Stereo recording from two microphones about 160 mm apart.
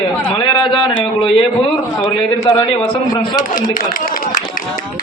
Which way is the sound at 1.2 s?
35° left (ahead or behind).